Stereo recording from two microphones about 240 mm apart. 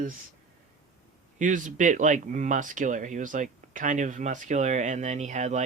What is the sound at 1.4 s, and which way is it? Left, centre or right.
Speech, right.